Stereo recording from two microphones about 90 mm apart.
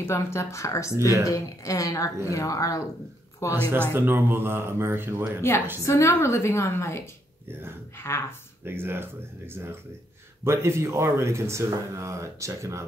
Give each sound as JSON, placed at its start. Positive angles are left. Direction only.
{"t": 0.0, "sound": "a woman's voice", "side_deg": 30}
{"t": 0.9, "sound": "speech", "side_deg": -35}
{"t": 1.2, "sound": "a woman's voice", "side_deg": 35}
{"t": 3.9, "sound": "speech", "side_deg": -25}
{"t": 5.9, "sound": "a woman's voice", "side_deg": 30}
{"t": 8.6, "sound": "speech", "side_deg": -25}